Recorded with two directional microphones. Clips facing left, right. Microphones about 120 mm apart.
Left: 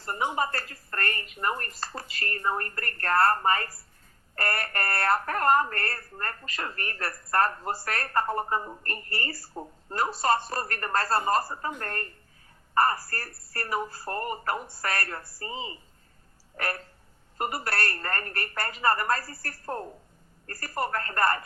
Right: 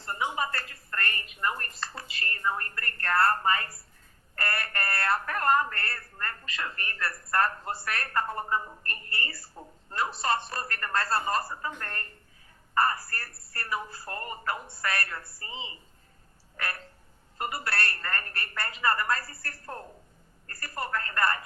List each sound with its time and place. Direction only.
0.0 s a woman's voice: 40° left (ahead or behind)
12.8 s a woman's voice: 40° left (ahead or behind)
17.3 s a woman's voice: 40° left (ahead or behind)